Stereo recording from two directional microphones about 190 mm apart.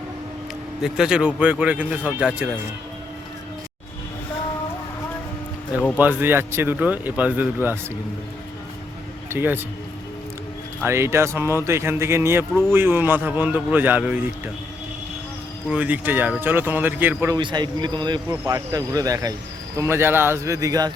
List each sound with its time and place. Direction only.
0.8 s speech: 5° right (ahead or behind)
6.0 s a man's voice: 10° right (ahead or behind)
9.3 s a man's voice: 10° right (ahead or behind)
10.8 s a man's voice: 15° right (ahead or behind)
15.7 s a man's voice: 10° right (ahead or behind)
17.3 s a man's voice: 20° right (ahead or behind)